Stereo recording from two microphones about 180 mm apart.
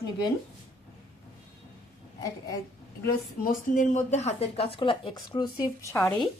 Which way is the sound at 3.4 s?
45° left (ahead or behind).